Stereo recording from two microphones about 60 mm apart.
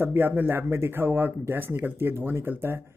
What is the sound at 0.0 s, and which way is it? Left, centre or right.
Speech, right.